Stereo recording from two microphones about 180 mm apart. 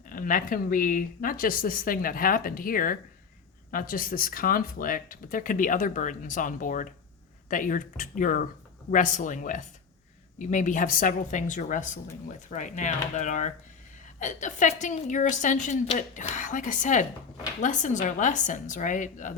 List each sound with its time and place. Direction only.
0.1 s speech: 50° left (ahead or behind)